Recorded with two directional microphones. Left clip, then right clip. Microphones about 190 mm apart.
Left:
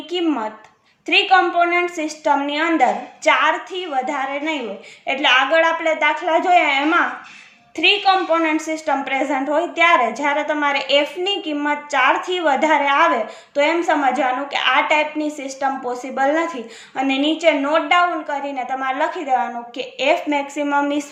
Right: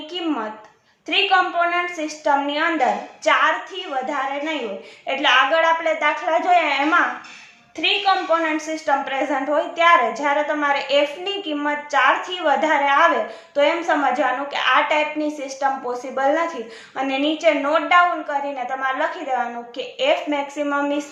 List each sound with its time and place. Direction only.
0.1 s a woman's voice: 35° left (ahead or behind)